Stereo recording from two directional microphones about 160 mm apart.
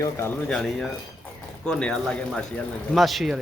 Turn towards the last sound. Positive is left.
turn(degrees=0)  # may be behind; listen again after turning